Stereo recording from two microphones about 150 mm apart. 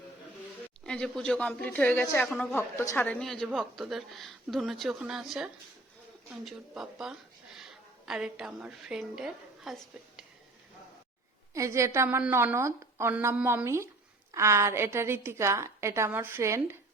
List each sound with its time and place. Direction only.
0.9 s a woman's voice: 5° left (ahead or behind)
11.5 s a woman's voice: 20° right (ahead or behind)